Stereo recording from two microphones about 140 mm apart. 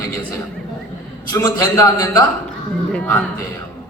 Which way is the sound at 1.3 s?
20° left (ahead or behind).